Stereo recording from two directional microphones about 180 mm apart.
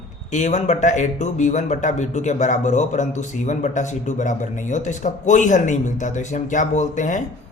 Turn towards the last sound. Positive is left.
turn(degrees=45)  # may be behind; listen again after turning